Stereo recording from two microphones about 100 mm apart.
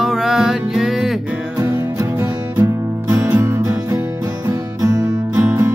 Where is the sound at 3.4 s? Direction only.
30° right (ahead or behind).